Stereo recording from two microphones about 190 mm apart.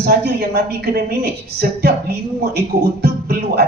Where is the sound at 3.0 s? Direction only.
55° right (ahead or behind).